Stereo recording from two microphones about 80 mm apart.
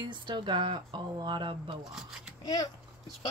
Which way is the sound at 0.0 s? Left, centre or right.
Right.